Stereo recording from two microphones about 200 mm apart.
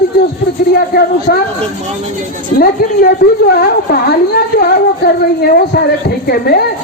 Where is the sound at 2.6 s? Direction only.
50° left (ahead or behind).